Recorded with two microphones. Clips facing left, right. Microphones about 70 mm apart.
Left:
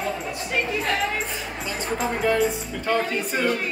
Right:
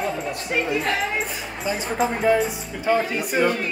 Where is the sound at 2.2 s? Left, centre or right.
Centre.